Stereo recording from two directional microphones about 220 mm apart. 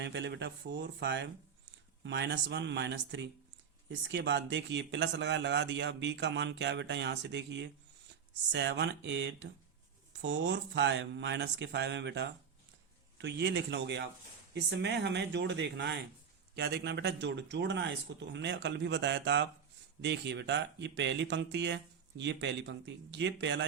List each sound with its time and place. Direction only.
0.0 s speech: 55° right (ahead or behind)